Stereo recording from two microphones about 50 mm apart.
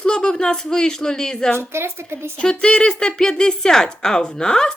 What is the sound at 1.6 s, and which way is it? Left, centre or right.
Speech, right.